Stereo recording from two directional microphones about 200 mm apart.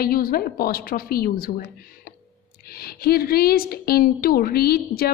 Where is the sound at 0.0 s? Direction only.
50° left (ahead or behind).